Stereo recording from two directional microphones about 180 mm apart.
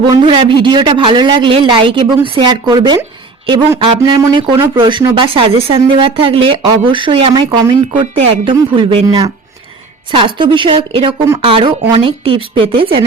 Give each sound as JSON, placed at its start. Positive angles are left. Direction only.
{"t": 0.0, "sound": "a man's voice", "side_deg": -25}